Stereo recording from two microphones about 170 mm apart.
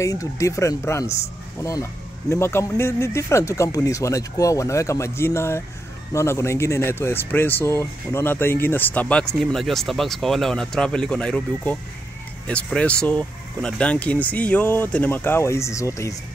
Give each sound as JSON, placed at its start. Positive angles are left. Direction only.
{"t": 0.0, "sound": "speech", "side_deg": 20}